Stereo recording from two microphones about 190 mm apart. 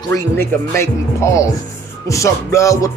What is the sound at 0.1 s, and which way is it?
Music, 15° left (ahead or behind).